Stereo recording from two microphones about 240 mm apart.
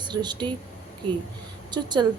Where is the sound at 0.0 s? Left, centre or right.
Centre.